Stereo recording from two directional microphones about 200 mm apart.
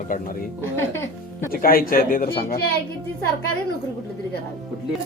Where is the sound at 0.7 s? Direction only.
10° left (ahead or behind).